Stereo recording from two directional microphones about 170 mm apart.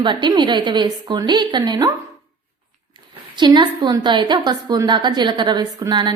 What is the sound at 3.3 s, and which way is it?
A woman's voice, 25° right (ahead or behind).